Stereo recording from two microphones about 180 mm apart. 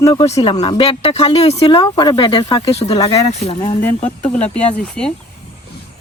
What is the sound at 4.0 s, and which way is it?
Speech, 40° left (ahead or behind).